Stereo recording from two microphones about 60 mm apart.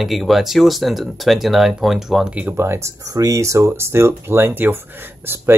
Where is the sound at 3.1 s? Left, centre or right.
Right.